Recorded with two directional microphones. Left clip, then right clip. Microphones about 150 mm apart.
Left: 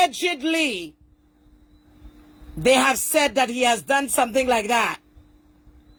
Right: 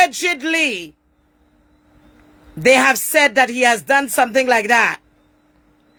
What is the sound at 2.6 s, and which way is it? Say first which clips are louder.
Speech: right 5 dB; 30° right (ahead or behind).